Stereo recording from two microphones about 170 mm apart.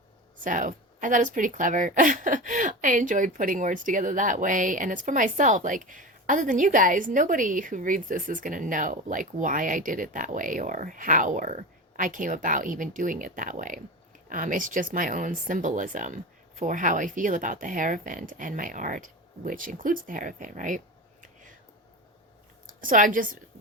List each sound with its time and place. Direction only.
0.4 s a woman's voice: 50° right (ahead or behind)
22.6 s a woman's voice: 55° right (ahead or behind)